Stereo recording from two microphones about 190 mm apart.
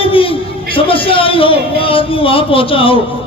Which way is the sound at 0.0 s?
30° left (ahead or behind).